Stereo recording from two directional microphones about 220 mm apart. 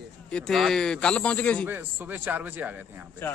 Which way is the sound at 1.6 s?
10° right (ahead or behind).